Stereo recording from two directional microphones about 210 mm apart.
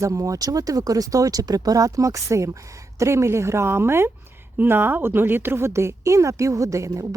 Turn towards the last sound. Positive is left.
turn(degrees=-15)  # may be behind; listen again after turning